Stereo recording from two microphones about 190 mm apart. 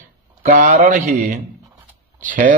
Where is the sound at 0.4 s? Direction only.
45° right (ahead or behind).